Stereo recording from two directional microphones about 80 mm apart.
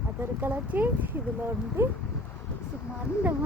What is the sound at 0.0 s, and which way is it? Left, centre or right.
Speech, right.